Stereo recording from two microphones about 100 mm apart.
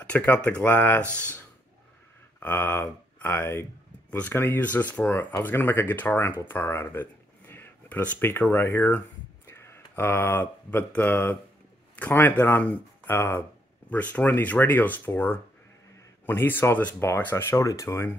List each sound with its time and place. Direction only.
0.0 s speech: 15° left (ahead or behind)
2.4 s speech: 20° left (ahead or behind)